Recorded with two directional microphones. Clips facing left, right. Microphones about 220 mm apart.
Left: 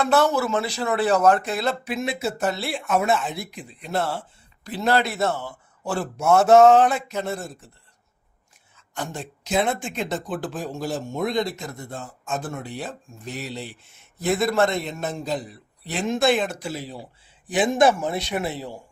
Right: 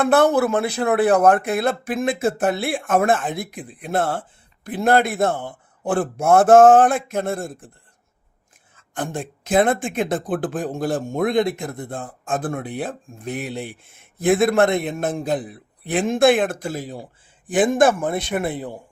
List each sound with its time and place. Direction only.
0.0 s speech: 55° right (ahead or behind)
8.7 s speech: 50° right (ahead or behind)